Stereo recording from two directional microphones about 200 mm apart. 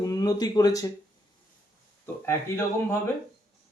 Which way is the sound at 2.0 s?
15° left (ahead or behind).